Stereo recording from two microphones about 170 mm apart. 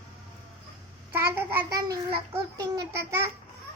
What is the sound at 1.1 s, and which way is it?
Child singing, 15° right (ahead or behind).